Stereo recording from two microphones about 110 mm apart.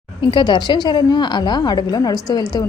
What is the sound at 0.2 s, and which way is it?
A woman's voice, 45° left (ahead or behind).